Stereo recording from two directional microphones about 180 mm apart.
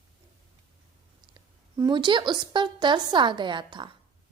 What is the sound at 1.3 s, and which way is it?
A woman's voice, 25° right (ahead or behind).